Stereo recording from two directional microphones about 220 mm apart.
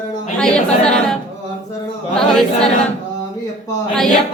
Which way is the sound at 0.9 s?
5° left (ahead or behind).